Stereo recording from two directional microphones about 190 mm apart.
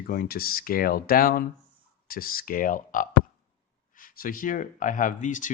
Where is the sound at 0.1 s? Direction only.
50° left (ahead or behind).